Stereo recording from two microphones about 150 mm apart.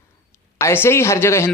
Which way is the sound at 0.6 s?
15° left (ahead or behind).